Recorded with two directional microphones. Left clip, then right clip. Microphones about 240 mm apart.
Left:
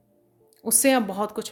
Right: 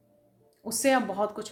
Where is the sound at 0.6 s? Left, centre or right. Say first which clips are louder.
Left 3 dB; left.